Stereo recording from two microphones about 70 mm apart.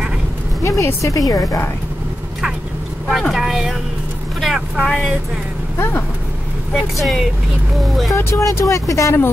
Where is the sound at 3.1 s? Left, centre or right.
Centre.